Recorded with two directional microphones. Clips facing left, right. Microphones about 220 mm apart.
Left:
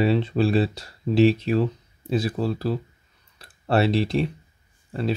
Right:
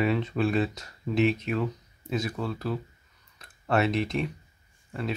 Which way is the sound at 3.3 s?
30° left (ahead or behind).